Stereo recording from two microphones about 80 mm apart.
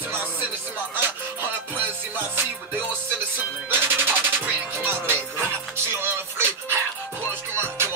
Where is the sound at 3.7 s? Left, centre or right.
Right.